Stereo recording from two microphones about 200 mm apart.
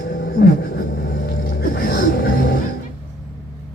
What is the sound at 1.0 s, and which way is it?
Music, 50° left (ahead or behind).